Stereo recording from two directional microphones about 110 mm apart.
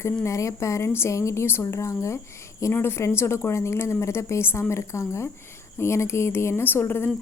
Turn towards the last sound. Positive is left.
turn(degrees=20)  # may be behind; listen again after turning